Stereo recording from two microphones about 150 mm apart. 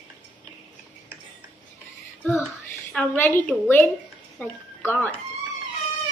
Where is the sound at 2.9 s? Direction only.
15° left (ahead or behind).